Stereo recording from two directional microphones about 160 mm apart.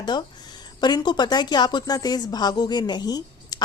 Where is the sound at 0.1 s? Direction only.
30° left (ahead or behind).